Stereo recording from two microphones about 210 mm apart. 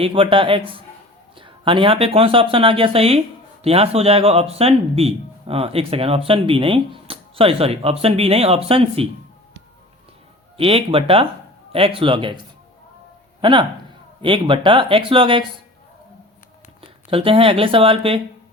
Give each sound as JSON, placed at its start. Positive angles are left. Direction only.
{"t": 0.0, "sound": "speech", "side_deg": -25}
{"t": 10.6, "sound": "speech", "side_deg": -25}
{"t": 13.4, "sound": "speech", "side_deg": -20}
{"t": 16.8, "sound": "speech", "side_deg": -25}